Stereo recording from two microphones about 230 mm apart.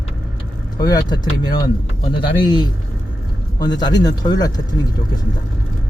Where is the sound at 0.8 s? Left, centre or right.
Centre.